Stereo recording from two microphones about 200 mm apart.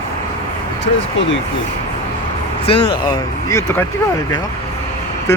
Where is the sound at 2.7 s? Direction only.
25° left (ahead or behind).